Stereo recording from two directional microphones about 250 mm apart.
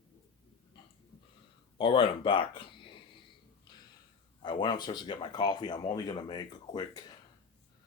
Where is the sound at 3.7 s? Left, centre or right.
Centre.